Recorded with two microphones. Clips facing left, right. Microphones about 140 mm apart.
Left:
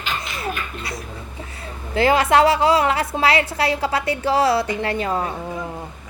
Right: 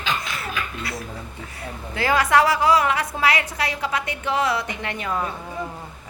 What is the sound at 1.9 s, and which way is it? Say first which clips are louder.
A woman's voice: left 3 dB; 25° left (ahead or behind).